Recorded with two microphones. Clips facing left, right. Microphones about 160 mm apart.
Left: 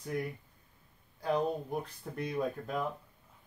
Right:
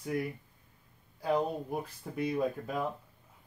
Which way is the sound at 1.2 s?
5° right (ahead or behind).